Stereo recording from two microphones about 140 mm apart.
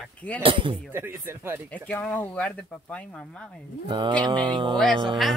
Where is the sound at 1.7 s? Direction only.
10° left (ahead or behind).